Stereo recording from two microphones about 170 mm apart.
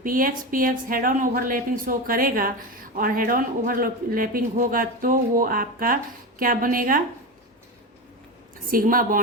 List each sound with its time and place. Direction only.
0.0 s speech: 55° right (ahead or behind)
8.7 s speech: 55° right (ahead or behind)